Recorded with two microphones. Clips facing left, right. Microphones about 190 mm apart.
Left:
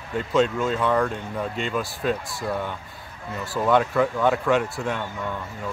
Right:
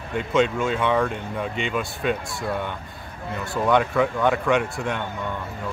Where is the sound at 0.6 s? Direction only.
Centre (ahead or behind).